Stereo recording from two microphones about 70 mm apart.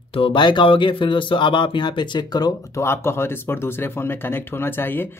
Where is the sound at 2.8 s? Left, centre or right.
Left.